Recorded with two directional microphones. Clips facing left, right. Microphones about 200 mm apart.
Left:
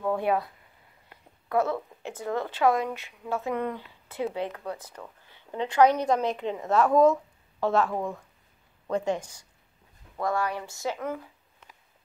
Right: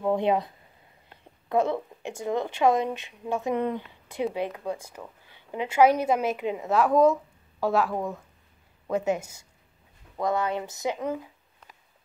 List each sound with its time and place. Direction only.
0.0 s speech: 20° right (ahead or behind)
1.5 s a woman's voice: 15° right (ahead or behind)
10.1 s speech: 20° right (ahead or behind)